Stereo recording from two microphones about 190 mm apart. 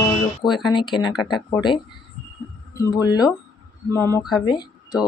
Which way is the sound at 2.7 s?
15° left (ahead or behind).